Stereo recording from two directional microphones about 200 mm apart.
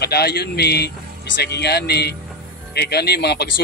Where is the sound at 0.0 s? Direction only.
55° left (ahead or behind).